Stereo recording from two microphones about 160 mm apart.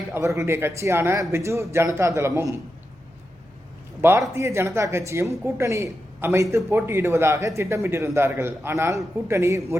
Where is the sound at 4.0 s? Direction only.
15° right (ahead or behind).